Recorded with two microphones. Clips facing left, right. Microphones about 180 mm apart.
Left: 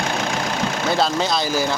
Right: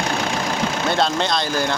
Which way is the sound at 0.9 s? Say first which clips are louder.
Left 1 dB; 5° left (ahead or behind).